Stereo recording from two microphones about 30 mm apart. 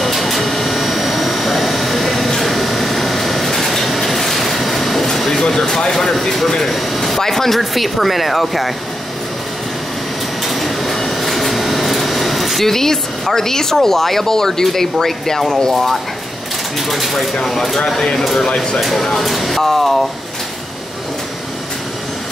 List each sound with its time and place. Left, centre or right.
0.0 s vehicle: centre
5.0 s air conditioning: centre
5.5 s a sound: centre
6.7 s a sound: centre
7.7 s speech: centre
10.4 s a sound: centre
12.6 s speech: centre
16.8 s speech: centre
17.4 s speech: centre
18.5 s speech: left
18.8 s speech: centre